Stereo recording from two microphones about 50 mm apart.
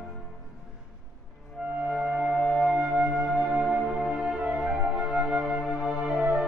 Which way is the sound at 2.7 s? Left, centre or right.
Right.